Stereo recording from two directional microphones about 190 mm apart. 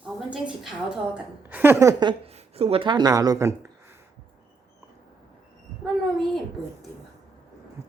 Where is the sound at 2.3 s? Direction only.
35° right (ahead or behind); by 4.0 s 10° right (ahead or behind).